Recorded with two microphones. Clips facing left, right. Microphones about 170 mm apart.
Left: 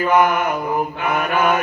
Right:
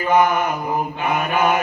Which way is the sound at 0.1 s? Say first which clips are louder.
Right 1 dB; 30° right (ahead or behind).